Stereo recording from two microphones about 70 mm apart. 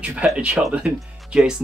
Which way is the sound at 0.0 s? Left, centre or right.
Centre.